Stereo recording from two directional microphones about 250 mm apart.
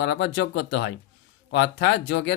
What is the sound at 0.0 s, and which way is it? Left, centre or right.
Speech, left.